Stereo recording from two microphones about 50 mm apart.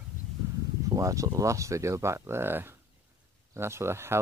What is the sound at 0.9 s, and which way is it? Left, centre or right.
Speech, right.